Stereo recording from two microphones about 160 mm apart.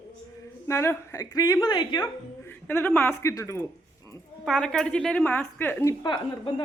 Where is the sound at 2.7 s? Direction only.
10° left (ahead or behind).